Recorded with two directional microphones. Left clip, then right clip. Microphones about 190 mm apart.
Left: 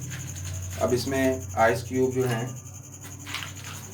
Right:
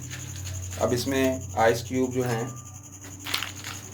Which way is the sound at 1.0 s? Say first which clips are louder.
Even; 40° right (ahead or behind).